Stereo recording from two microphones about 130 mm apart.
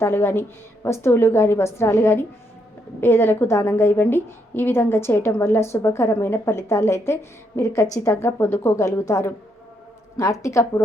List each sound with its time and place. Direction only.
0.0 s a woman's voice: 15° left (ahead or behind)